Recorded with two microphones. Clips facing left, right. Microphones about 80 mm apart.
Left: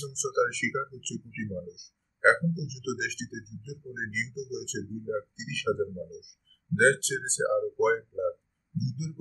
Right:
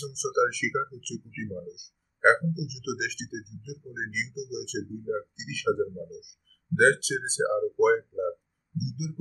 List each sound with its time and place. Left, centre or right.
0.0 s speech: centre